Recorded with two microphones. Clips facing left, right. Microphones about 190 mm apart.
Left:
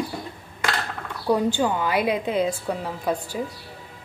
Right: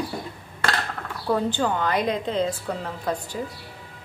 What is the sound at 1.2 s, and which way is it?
A woman's voice, 15° left (ahead or behind).